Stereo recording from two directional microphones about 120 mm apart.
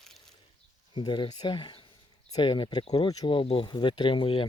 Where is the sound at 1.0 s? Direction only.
40° left (ahead or behind).